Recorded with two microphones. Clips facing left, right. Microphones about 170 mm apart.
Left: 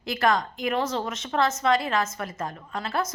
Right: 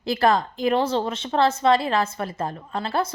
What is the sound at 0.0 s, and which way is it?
A woman's voice, 30° right (ahead or behind).